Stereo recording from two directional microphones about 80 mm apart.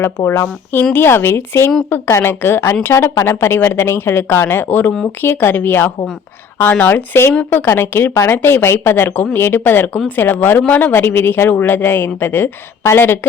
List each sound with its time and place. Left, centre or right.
0.3 s a woman's voice: left